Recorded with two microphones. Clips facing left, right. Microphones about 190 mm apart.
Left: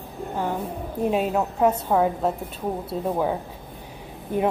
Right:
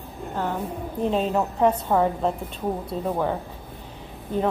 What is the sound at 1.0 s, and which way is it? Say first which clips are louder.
A woman's voice: even; 10° left (ahead or behind).